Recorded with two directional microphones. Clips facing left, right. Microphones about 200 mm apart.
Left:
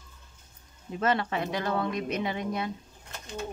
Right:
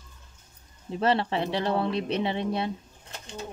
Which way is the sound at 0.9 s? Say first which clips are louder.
Right 3 dB; 30° right (ahead or behind).